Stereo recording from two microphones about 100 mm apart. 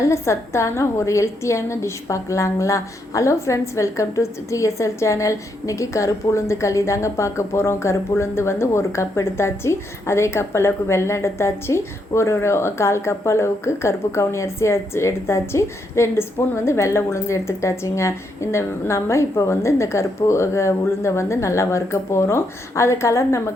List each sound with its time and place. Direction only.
0.0 s a woman's voice: 30° left (ahead or behind)